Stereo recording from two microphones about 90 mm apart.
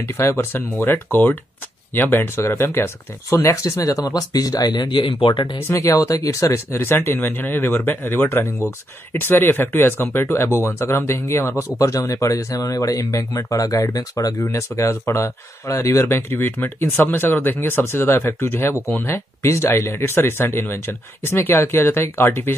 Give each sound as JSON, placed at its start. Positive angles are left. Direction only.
{"t": 0.0, "sound": "speech", "side_deg": 30}
{"t": 5.7, "sound": "speech", "side_deg": 35}